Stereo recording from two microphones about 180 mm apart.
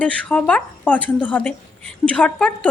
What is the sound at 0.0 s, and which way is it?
A woman's voice, 5° left (ahead or behind).